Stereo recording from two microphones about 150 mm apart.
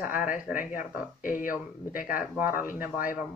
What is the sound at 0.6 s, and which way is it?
Speech, 60° left (ahead or behind).